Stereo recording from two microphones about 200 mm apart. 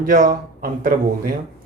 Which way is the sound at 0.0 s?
45° right (ahead or behind).